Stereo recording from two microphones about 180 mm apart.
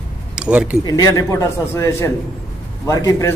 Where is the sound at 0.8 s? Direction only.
20° left (ahead or behind).